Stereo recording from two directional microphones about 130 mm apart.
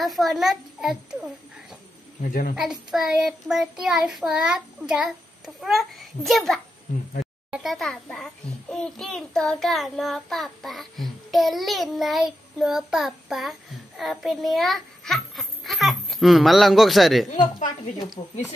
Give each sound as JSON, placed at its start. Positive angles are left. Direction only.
{"t": 0.0, "sound": "a child's voice", "side_deg": 0}
{"t": 2.5, "sound": "a child's voice", "side_deg": -5}
{"t": 17.3, "sound": "a woman's voice", "side_deg": 75}
{"t": 18.2, "sound": "speech", "side_deg": 45}